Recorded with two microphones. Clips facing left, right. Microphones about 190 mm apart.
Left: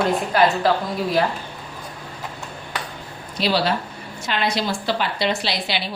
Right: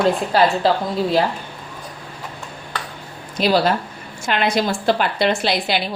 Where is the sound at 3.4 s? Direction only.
50° right (ahead or behind).